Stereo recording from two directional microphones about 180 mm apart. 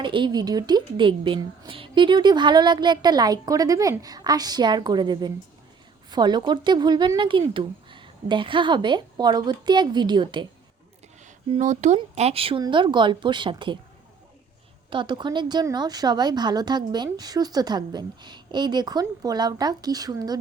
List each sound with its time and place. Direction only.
0.0 s speech: 25° right (ahead or behind)
11.5 s speech: 40° right (ahead or behind)
14.8 s speech: 25° right (ahead or behind)